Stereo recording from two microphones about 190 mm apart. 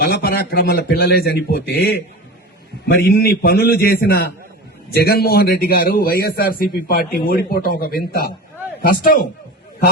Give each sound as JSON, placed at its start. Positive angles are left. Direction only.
{"t": 0.0, "sound": "a man's voice", "side_deg": 55}